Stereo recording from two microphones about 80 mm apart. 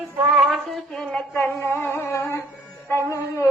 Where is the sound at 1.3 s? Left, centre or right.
Left.